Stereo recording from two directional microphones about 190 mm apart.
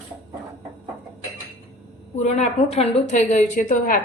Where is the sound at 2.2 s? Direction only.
35° left (ahead or behind).